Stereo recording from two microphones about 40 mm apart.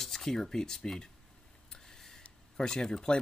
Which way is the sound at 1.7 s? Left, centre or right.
Centre.